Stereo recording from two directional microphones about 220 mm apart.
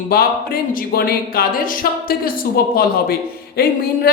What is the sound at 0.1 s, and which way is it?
Speech, 45° left (ahead or behind).